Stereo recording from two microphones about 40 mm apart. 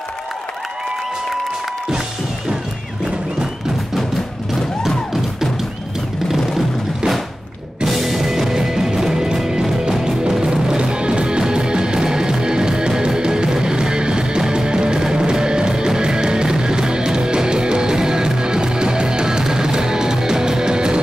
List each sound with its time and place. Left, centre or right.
4.8 s music: centre
7.8 s music: centre; by 21.0 s right